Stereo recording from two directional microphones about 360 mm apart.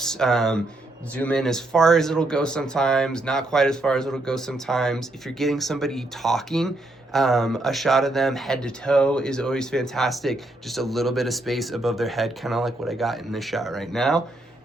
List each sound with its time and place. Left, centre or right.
0.0 s speech: centre